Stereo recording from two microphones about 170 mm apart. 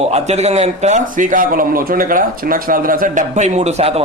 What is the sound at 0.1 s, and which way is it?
Speech, 40° right (ahead or behind).